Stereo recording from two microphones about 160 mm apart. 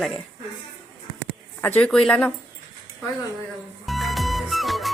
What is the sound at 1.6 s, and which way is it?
Speech, 5° left (ahead or behind).